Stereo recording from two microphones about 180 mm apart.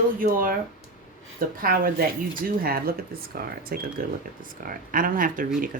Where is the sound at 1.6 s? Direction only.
50° right (ahead or behind).